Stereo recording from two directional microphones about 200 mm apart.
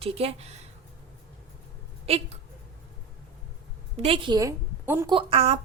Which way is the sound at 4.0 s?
25° right (ahead or behind).